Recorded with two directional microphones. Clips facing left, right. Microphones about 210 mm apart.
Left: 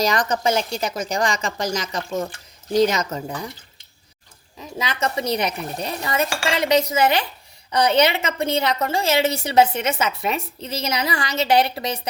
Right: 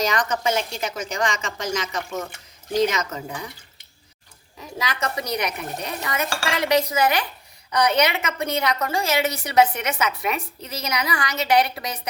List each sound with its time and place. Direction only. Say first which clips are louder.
0.0 s a woman's voice: left 2 dB; 35° left (ahead or behind)
4.8 s a woman's voice: left 3 dB; 25° left (ahead or behind)